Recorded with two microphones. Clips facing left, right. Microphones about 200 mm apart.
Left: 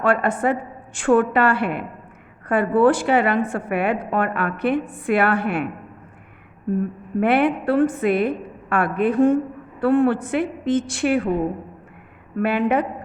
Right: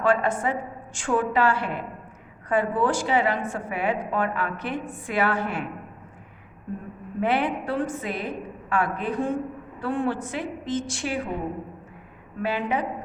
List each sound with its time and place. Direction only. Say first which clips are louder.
0.0 s a woman's voice: left 3 dB; 60° left (ahead or behind)
7.2 s a woman's voice: left 6 dB; 60° left (ahead or behind)
12.4 s a woman's voice: left 7 dB; 60° left (ahead or behind)